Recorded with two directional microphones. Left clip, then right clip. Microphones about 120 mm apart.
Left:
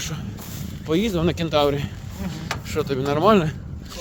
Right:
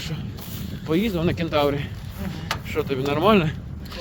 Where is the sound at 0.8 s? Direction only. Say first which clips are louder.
Left 1 dB; 40° left (ahead or behind).